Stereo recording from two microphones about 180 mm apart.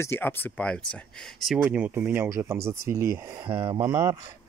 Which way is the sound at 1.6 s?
10° right (ahead or behind).